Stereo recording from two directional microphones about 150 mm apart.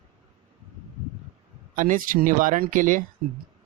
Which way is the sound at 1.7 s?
60° right (ahead or behind).